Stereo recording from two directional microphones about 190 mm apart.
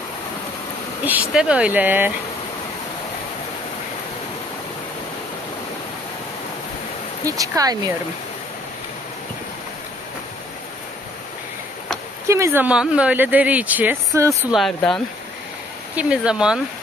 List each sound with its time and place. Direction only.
1.3 s speech: 5° right (ahead or behind)
7.2 s speech: 15° right (ahead or behind)
12.3 s speech: 15° right (ahead or behind)
14.5 s speech: centre (ahead or behind)
16.0 s speech: 5° right (ahead or behind)